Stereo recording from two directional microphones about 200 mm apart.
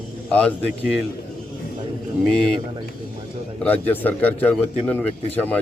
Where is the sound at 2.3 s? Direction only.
5° left (ahead or behind).